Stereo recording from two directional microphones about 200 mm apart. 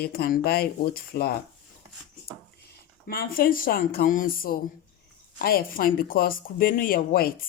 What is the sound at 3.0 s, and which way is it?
Speech, 45° left (ahead or behind).